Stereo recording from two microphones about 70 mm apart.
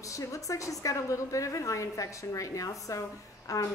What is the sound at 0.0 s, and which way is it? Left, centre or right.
A woman's voice, left.